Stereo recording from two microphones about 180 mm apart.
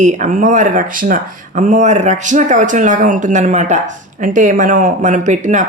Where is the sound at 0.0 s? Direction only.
40° right (ahead or behind).